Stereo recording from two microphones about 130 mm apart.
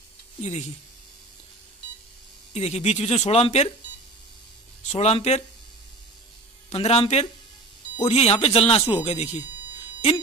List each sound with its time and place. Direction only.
0.4 s speech: 60° left (ahead or behind)
2.5 s speech: 55° left (ahead or behind)
4.8 s speech: 50° left (ahead or behind)
6.7 s speech: 55° left (ahead or behind)